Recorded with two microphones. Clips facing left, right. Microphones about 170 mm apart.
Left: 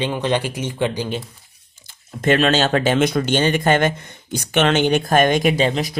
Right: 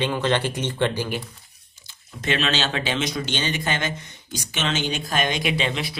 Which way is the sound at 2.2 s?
50° left (ahead or behind).